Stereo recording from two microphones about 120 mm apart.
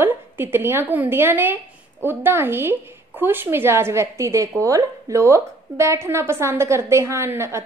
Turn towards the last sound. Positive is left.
turn(degrees=-20)  # may be behind; listen again after turning